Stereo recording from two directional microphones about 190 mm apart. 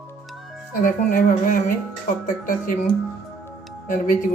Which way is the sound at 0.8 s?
45° left (ahead or behind).